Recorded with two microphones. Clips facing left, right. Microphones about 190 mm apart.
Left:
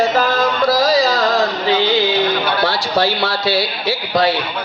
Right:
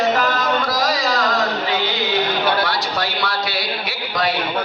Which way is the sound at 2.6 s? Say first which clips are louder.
Left 5 dB; 30° left (ahead or behind).